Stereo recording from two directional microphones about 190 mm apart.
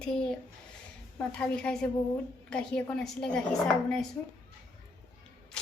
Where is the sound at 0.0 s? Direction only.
5° left (ahead or behind).